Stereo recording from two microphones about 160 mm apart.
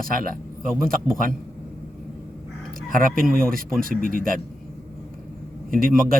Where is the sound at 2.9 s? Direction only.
60° right (ahead or behind).